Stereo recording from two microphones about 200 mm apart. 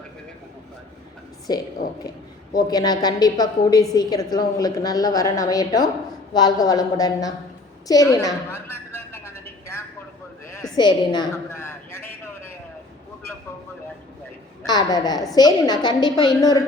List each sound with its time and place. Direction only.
2.6 s a woman's voice: 20° left (ahead or behind)
7.9 s a sound: 20° left (ahead or behind)
14.7 s a woman's voice: 20° left (ahead or behind)